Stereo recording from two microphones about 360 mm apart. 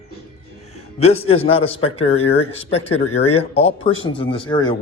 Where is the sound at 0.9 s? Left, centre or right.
Centre.